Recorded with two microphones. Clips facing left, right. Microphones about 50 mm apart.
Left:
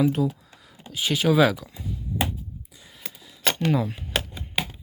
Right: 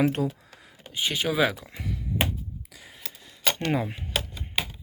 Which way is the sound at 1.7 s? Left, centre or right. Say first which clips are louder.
Right 1 dB; right.